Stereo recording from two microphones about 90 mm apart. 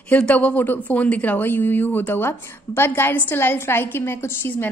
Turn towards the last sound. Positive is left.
turn(degrees=25)  # may be behind; listen again after turning